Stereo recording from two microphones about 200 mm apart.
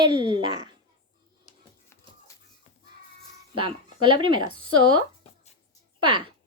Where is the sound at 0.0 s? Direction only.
20° right (ahead or behind).